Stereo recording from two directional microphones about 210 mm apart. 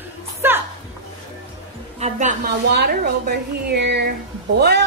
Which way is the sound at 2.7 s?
50° right (ahead or behind).